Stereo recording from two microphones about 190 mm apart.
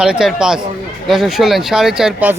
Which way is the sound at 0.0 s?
5° right (ahead or behind).